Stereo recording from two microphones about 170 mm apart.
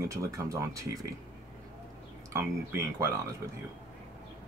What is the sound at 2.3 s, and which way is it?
Speech, 15° right (ahead or behind).